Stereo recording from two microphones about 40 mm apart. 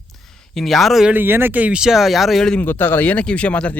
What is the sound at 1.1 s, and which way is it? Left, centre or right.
Speech, right.